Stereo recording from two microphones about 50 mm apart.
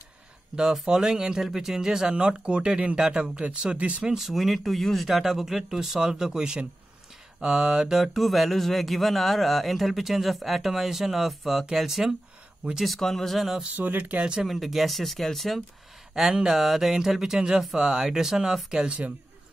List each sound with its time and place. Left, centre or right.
0.8 s speech: centre
4.1 s speech: centre
7.3 s mantra: centre
11.6 s speech: centre
12.7 s mantra: centre
13.7 s speech: right
14.4 s mantra: centre
16.2 s speech: centre